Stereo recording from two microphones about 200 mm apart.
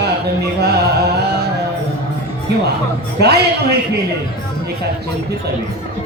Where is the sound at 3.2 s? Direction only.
55° right (ahead or behind).